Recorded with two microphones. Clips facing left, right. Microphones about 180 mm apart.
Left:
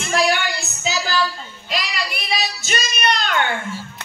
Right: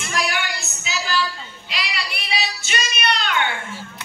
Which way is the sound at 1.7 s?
45° left (ahead or behind).